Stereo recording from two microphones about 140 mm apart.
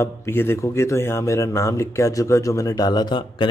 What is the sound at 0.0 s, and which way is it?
Speech, 15° left (ahead or behind).